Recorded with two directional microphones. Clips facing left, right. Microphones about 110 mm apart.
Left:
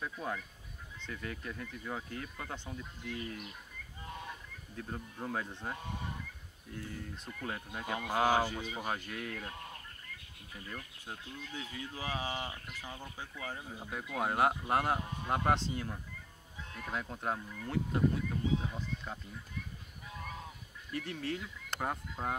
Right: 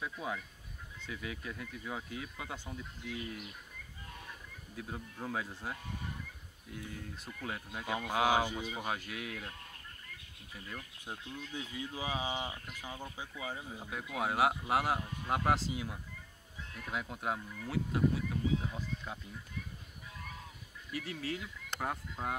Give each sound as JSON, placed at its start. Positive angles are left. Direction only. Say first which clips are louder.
{"t": 0.0, "sound": "speech", "louder": "even", "side_deg": -5}
{"t": 4.7, "sound": "speech", "louder": "left 1 dB", "side_deg": -5}
{"t": 8.2, "sound": "speech", "louder": "left 1 dB", "side_deg": -15}
{"t": 8.6, "sound": "speech", "louder": "even", "side_deg": 0}
{"t": 11.1, "sound": "speech", "louder": "right 2 dB", "side_deg": -15}
{"t": 20.9, "sound": "speech", "louder": "left 1 dB", "side_deg": -5}